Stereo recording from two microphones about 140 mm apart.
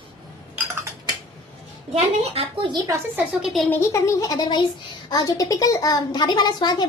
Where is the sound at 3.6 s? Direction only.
15° left (ahead or behind).